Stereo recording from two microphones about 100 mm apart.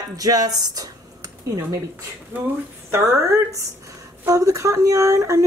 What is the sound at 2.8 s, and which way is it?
Speech, 30° right (ahead or behind).